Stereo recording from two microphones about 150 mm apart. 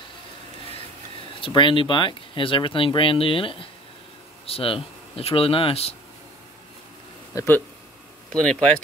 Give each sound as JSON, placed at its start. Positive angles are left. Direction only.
{"t": 1.4, "sound": "speech", "side_deg": 35}
{"t": 7.3, "sound": "speech", "side_deg": 15}